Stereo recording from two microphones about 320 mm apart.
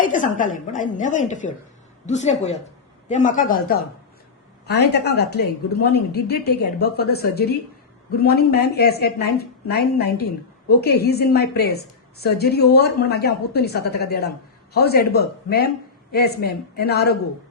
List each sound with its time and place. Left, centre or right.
0.0 s a woman's voice: left